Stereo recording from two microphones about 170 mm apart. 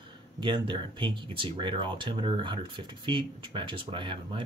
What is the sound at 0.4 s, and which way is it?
Speech, 30° right (ahead or behind).